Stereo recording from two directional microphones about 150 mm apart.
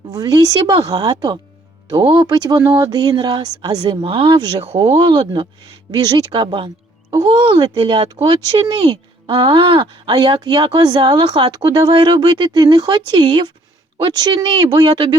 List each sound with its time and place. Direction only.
0.1 s speech: 25° right (ahead or behind); by 4.9 s 40° right (ahead or behind)
4.9 s speech: 30° right (ahead or behind)